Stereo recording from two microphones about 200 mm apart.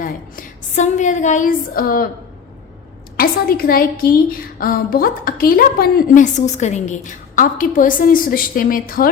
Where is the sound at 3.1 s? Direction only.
50° left (ahead or behind).